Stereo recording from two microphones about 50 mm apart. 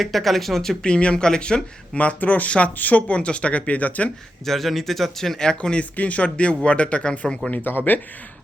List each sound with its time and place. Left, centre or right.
0.0 s speech: centre
0.9 s speech: centre
2.0 s speech: left
4.4 s speech: centre
6.0 s speech: left